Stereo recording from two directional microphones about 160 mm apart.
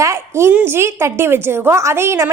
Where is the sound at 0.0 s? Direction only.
20° right (ahead or behind).